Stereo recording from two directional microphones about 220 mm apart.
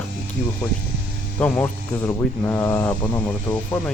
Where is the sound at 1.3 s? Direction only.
10° left (ahead or behind).